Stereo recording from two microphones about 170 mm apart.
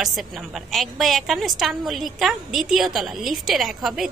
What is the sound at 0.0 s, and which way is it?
A woman's voice, centre (ahead or behind).